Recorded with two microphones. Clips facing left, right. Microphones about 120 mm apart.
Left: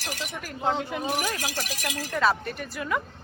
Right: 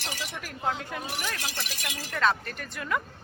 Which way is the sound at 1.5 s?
40° left (ahead or behind).